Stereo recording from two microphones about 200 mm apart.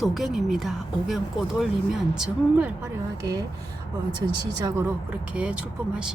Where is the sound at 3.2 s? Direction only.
20° right (ahead or behind).